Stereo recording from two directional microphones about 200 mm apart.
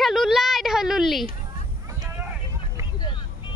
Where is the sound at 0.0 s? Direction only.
Centre (ahead or behind).